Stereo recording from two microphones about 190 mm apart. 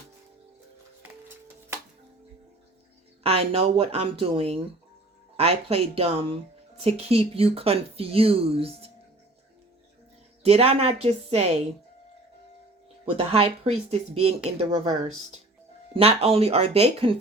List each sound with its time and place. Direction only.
3.2 s speech: 30° right (ahead or behind)
10.4 s speech: 30° right (ahead or behind)
13.1 s speech: 30° right (ahead or behind)